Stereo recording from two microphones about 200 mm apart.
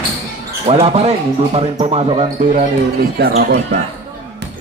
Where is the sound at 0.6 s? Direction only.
30° right (ahead or behind); by 3.3 s 50° right (ahead or behind).